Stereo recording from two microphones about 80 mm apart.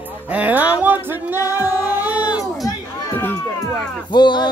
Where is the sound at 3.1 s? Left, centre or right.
Left.